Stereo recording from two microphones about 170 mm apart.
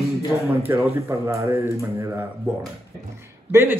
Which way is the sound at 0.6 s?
15° right (ahead or behind).